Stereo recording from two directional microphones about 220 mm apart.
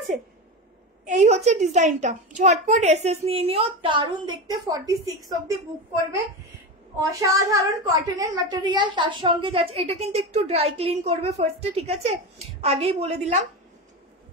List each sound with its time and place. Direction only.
1.0 s a child's voice: 35° right (ahead or behind); by 5.4 s 15° right (ahead or behind)
7.0 s a woman's voice: 15° right (ahead or behind)